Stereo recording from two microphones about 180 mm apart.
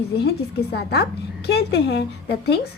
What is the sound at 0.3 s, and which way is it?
A woman's voice, 60° left (ahead or behind).